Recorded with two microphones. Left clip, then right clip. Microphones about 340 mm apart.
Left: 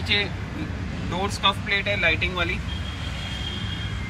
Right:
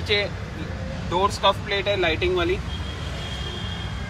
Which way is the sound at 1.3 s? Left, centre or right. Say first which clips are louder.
Left 1 dB; centre.